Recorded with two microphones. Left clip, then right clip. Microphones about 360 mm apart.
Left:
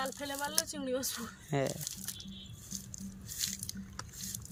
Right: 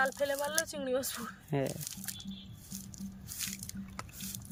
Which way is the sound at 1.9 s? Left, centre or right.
Right.